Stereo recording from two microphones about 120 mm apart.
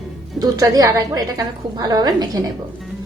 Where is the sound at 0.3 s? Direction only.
30° right (ahead or behind).